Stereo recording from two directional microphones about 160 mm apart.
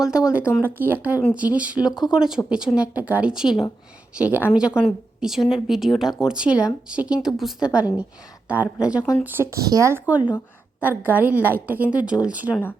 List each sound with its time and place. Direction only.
0.0 s a woman's voice: 5° right (ahead or behind)